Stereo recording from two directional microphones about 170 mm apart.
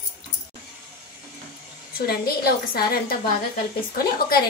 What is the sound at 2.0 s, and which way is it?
A woman's voice, 65° left (ahead or behind).